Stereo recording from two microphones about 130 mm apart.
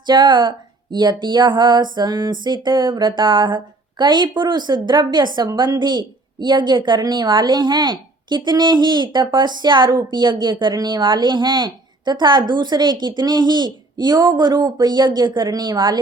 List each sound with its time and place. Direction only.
0.0 s speech: 35° right (ahead or behind)